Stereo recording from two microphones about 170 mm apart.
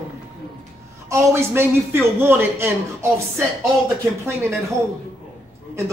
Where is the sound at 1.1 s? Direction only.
15° right (ahead or behind).